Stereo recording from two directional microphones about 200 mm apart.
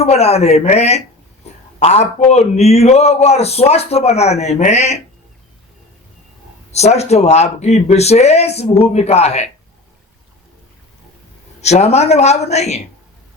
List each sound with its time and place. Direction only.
0.0 s a man's voice: 30° left (ahead or behind)
1.5 s a sound: 35° left (ahead or behind)
1.8 s a man's voice: 35° left (ahead or behind)
6.7 s a man's voice: 35° left (ahead or behind)
11.6 s a man's voice: 35° left (ahead or behind)